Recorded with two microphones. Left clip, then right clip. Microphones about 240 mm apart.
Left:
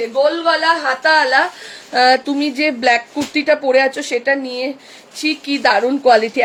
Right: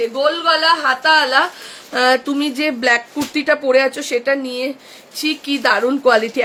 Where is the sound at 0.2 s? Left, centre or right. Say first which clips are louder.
Left 2 dB; centre.